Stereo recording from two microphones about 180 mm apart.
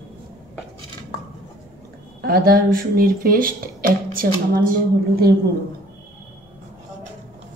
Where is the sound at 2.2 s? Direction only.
55° right (ahead or behind).